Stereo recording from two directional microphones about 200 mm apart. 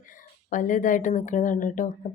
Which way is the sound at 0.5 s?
40° left (ahead or behind).